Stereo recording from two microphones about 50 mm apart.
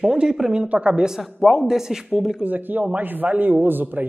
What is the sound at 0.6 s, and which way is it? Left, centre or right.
Speech, right.